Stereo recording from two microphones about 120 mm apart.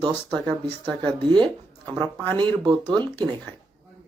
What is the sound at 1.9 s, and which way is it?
Speech, 15° left (ahead or behind).